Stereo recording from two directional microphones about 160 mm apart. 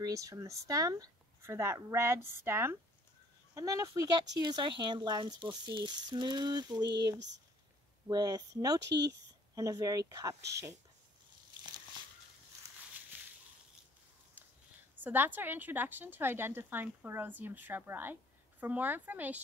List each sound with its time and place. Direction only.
0.0 s a woman's voice: 20° right (ahead or behind)
8.1 s speech: 25° right (ahead or behind)
8.8 s speech: 90° right
9.6 s speech: 20° right (ahead or behind)
13.1 s a sound: 10° right (ahead or behind)
15.0 s a woman's voice: 10° right (ahead or behind)